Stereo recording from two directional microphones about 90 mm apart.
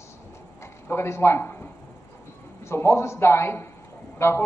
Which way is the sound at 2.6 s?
30° left (ahead or behind).